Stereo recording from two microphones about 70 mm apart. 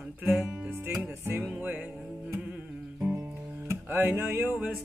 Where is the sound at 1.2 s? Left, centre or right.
Right.